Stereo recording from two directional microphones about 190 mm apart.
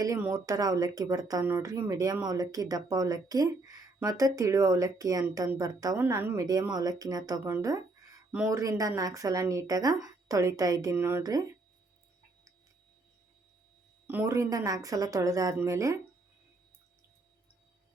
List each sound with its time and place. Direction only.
0.0 s speech: 15° right (ahead or behind)
8.3 s speech: 5° right (ahead or behind)
8.5 s speech: 15° right (ahead or behind)
14.1 s speech: 15° right (ahead or behind)